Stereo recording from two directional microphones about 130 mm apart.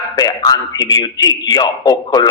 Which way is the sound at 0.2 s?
30° left (ahead or behind).